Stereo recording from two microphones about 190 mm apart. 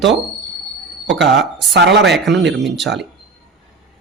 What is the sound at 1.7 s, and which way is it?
Speech, 65° right (ahead or behind).